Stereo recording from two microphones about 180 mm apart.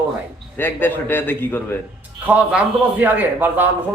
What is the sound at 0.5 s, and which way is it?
A man's voice, 10° left (ahead or behind).